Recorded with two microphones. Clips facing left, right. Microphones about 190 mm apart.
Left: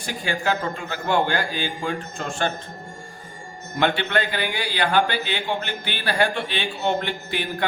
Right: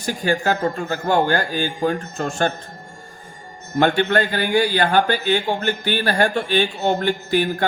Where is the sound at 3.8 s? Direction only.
45° right (ahead or behind).